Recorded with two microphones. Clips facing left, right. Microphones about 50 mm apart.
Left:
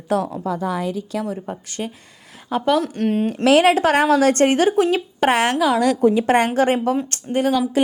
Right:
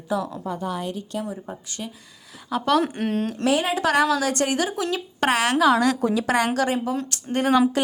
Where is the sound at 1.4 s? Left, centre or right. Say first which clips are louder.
Left 6 dB; left.